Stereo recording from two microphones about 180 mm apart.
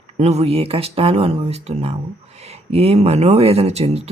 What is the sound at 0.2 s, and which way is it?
Speech, 35° right (ahead or behind).